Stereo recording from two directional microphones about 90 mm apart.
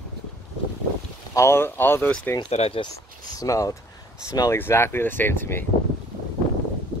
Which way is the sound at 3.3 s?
40° left (ahead or behind).